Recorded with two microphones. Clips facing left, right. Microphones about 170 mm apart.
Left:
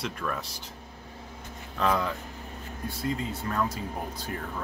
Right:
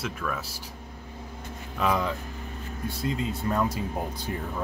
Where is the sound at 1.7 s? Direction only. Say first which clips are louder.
Right 1 dB; 10° right (ahead or behind).